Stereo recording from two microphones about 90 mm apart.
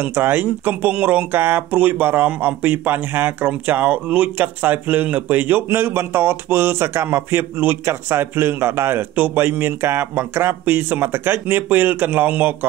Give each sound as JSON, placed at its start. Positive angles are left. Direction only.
{"t": 0.0, "sound": "speech", "side_deg": -25}